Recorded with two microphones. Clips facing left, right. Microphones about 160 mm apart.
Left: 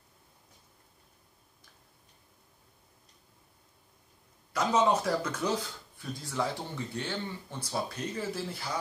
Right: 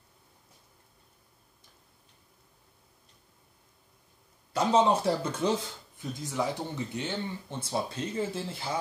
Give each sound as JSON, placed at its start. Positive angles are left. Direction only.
{"t": 4.5, "sound": "speech", "side_deg": -30}